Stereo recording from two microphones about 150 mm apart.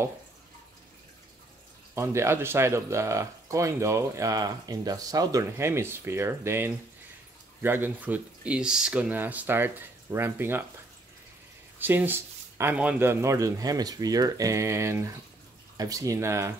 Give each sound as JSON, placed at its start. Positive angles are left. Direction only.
{"t": 2.0, "sound": "speech", "side_deg": -15}
{"t": 11.8, "sound": "speech", "side_deg": -15}